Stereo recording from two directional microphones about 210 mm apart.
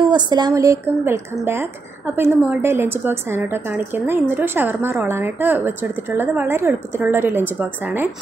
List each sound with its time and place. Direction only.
0.3 s a woman's voice: 20° right (ahead or behind)